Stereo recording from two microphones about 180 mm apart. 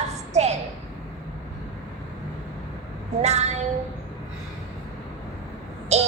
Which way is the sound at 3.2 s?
40° right (ahead or behind).